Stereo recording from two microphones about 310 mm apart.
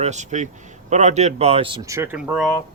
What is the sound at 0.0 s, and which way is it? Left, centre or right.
Speech, right.